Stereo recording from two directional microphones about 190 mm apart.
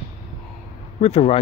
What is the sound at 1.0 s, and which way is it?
Speech, 30° left (ahead or behind).